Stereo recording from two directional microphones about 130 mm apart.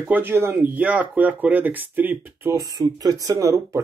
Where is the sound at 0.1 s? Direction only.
15° right (ahead or behind).